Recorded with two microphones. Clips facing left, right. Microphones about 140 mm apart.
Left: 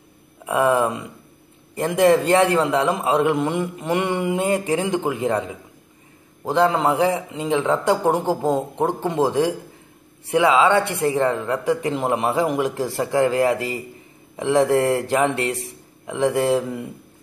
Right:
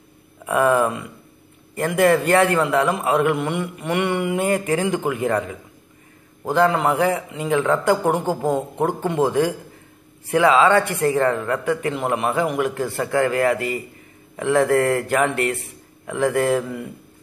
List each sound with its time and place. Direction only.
0.5 s speech: 15° left (ahead or behind)
3.3 s mantra: 30° left (ahead or behind)
3.6 s speech: 30° left (ahead or behind)
7.9 s speech: 30° left (ahead or behind)
8.5 s speech: 15° left (ahead or behind)
10.3 s speech: 15° left (ahead or behind)
11.6 s speech: 25° left (ahead or behind)
16.1 s speech: 15° left (ahead or behind)